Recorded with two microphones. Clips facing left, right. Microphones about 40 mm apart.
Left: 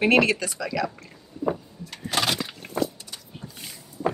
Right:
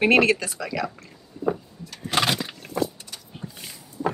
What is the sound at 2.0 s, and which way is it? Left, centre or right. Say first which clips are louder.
Keys jangling: right 2 dB; centre.